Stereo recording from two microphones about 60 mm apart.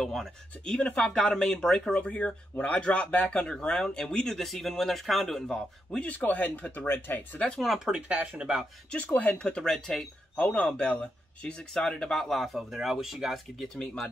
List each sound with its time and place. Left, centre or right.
0.0 s speech: centre
0.7 s a man's voice: centre
5.9 s speech: left
7.5 s a man's voice: centre
7.9 s speech: right
8.9 s speech: left
9.4 s speech: centre
10.3 s speech: left; by 13.7 s centre